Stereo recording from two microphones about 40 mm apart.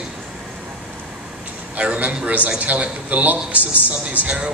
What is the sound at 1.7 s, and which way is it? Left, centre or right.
A man's voice, right.